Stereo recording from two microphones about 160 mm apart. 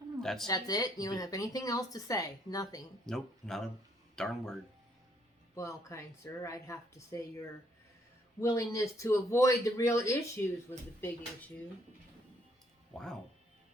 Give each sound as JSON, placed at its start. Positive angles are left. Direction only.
{"t": 0.2, "sound": "speech", "side_deg": 0}
{"t": 0.4, "sound": "speech", "side_deg": 25}
{"t": 3.1, "sound": "speech", "side_deg": 5}
{"t": 5.5, "sound": "speech", "side_deg": 20}
{"t": 12.9, "sound": "speech", "side_deg": 0}